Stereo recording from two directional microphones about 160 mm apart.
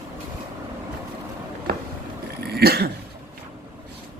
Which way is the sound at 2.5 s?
80° right.